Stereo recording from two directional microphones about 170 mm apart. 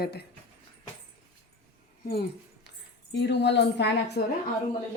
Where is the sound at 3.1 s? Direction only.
90° left.